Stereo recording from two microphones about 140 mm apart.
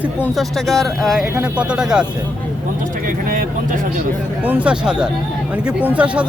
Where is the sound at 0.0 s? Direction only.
10° right (ahead or behind).